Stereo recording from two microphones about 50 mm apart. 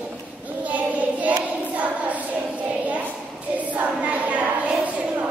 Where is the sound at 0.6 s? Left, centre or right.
Right.